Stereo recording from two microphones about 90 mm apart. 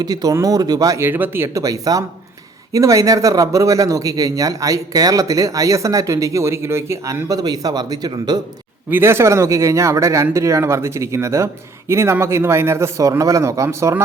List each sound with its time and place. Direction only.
0.0 s speech: 45° right (ahead or behind)
0.9 s speech: 25° right (ahead or behind)
1.6 s speech: 40° right (ahead or behind)
8.9 s speech: 25° right (ahead or behind)